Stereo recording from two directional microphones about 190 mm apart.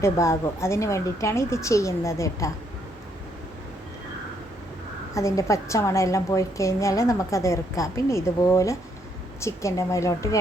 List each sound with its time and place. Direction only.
0.0 s a woman's voice: 15° left (ahead or behind)
5.1 s a woman's voice: 15° left (ahead or behind)